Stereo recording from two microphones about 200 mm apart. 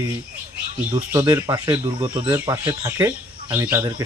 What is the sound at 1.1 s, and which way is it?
Speech, 15° right (ahead or behind).